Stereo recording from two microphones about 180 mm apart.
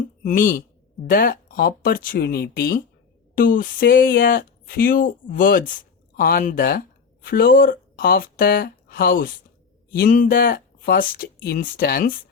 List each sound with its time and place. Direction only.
0.0 s speech: 45° left (ahead or behind)